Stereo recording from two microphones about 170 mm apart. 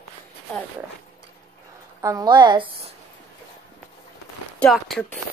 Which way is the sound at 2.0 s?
20° right (ahead or behind).